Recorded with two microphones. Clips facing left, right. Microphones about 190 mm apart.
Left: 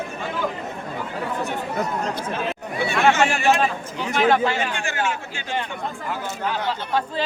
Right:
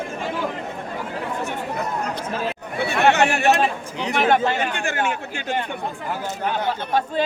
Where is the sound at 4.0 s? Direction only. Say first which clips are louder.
Even; 20° right (ahead or behind).